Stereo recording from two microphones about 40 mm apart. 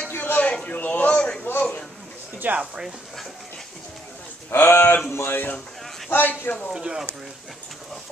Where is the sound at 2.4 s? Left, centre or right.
Right.